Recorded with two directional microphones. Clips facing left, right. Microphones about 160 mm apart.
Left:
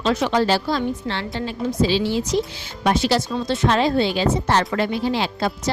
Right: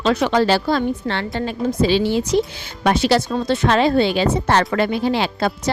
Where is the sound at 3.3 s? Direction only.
50° right (ahead or behind).